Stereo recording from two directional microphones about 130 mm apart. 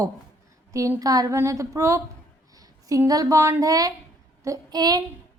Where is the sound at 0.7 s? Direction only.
25° right (ahead or behind).